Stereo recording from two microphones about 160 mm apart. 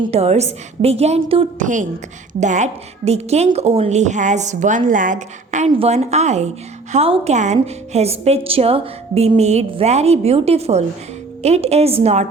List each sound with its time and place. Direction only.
0.0 s a woman's voice: 40° right (ahead or behind)
1.5 s a woman's voice: 55° right (ahead or behind)